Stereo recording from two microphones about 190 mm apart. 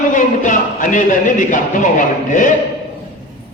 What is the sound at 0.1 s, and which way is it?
Speech, 45° left (ahead or behind).